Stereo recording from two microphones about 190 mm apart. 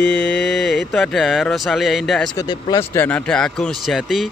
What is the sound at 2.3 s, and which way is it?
Speech, 20° left (ahead or behind).